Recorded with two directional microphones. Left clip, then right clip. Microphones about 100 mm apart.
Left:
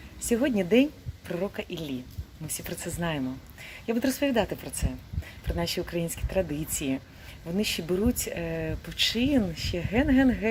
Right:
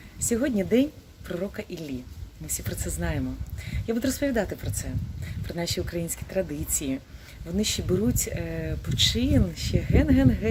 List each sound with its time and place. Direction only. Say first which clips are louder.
0.3 s speech: even; 10° right (ahead or behind)